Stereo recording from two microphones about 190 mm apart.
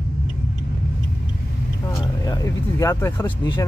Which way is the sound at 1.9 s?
15° left (ahead or behind).